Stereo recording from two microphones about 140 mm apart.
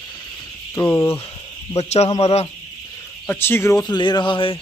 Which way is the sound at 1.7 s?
50° left (ahead or behind).